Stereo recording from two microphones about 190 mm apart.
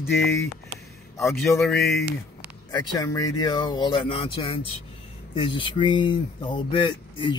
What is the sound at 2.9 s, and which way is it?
Speech, 20° left (ahead or behind).